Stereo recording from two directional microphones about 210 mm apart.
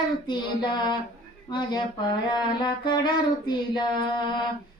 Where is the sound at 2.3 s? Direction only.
20° left (ahead or behind).